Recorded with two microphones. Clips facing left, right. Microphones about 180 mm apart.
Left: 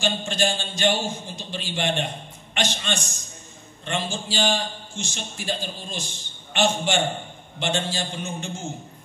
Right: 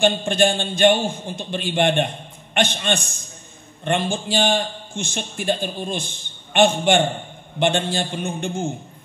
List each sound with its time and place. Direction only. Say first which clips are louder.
0.0 s a man's voice: right 7 dB; 55° right (ahead or behind)